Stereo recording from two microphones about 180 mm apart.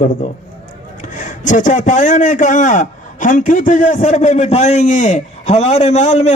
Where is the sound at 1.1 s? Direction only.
45° left (ahead or behind).